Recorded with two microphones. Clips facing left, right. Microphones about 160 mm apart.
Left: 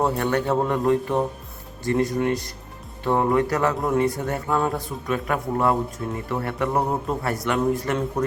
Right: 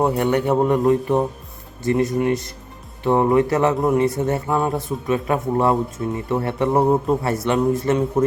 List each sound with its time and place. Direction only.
0.0 s speech: 20° right (ahead or behind)